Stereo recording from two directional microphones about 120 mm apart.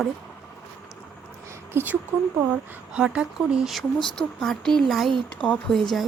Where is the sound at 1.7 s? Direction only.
15° right (ahead or behind); by 5.8 s 10° left (ahead or behind).